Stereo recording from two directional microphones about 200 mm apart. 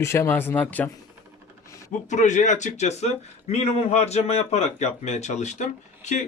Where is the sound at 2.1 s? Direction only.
35° left (ahead or behind).